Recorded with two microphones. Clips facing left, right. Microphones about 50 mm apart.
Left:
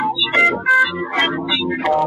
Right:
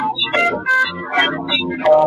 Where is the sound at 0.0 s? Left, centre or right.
Centre.